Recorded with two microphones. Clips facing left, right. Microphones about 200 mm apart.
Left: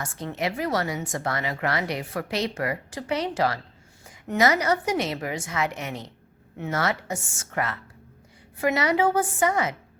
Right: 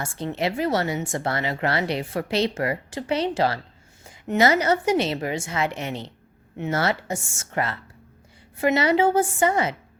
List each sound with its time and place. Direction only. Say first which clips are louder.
0.0 s speech: right 3 dB; 30° right (ahead or behind)